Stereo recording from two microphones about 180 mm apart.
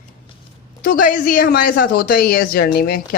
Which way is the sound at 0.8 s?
50° left (ahead or behind).